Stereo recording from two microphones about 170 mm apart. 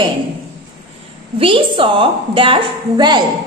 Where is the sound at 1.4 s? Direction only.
30° right (ahead or behind).